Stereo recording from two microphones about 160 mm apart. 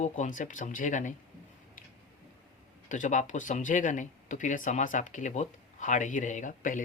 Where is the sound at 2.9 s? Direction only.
50° left (ahead or behind).